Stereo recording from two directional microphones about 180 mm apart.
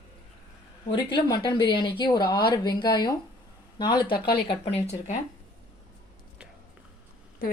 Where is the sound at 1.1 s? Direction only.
25° left (ahead or behind).